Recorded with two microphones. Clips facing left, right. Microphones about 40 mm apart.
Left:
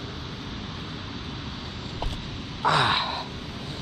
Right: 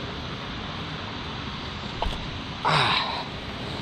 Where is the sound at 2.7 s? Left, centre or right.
Centre.